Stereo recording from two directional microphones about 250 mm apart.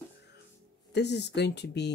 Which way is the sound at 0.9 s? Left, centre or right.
Left.